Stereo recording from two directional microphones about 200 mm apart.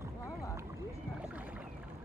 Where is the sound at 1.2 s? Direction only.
10° right (ahead or behind).